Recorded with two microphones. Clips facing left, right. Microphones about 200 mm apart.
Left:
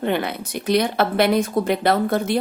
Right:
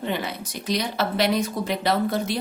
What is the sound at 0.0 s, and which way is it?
A woman's voice, 60° left (ahead or behind).